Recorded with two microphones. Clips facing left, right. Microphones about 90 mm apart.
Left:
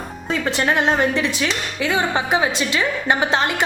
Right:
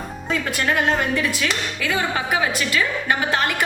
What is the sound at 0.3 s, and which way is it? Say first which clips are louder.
Speech: left 2 dB; 25° left (ahead or behind).